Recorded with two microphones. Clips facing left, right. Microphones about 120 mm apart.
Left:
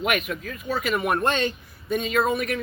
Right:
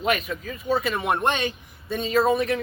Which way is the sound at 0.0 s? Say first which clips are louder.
Right 1 dB; 30° right (ahead or behind).